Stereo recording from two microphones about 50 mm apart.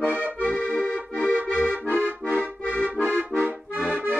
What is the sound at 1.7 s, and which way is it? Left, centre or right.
Accordion, right.